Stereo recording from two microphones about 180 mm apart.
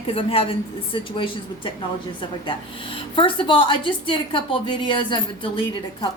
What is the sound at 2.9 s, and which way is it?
A woman's voice, 30° left (ahead or behind).